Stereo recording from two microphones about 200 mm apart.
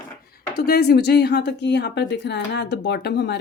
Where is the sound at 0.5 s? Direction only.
50° left (ahead or behind).